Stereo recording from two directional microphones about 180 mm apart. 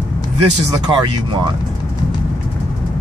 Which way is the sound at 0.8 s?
25° right (ahead or behind).